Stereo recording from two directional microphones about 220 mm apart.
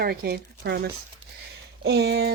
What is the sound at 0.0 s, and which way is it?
Speech, 45° right (ahead or behind).